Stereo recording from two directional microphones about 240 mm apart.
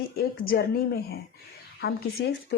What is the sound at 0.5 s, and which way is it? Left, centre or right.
Speech, left.